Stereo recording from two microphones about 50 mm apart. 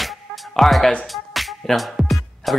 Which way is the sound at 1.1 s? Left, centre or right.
Centre.